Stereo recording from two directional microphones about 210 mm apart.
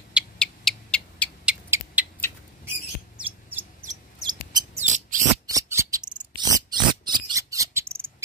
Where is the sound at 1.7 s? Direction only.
10° right (ahead or behind).